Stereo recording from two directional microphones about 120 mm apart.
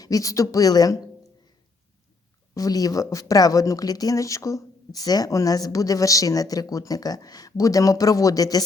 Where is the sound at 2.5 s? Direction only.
30° left (ahead or behind).